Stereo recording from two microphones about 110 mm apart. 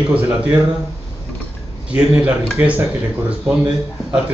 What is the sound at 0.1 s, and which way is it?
Speech, 15° right (ahead or behind).